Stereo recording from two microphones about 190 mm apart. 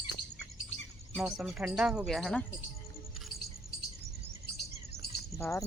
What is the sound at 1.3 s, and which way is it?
A woman's voice, 5° right (ahead or behind).